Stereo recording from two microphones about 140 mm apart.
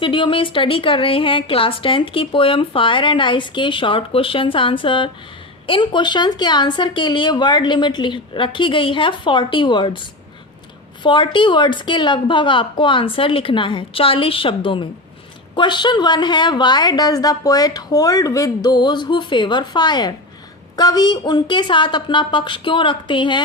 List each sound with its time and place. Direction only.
0.0 s a woman's voice: 35° left (ahead or behind)
11.0 s a woman's voice: 35° left (ahead or behind)